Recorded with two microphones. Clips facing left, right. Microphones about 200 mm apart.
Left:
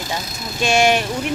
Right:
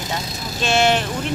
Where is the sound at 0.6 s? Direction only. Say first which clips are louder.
Left 2 dB; 10° left (ahead or behind).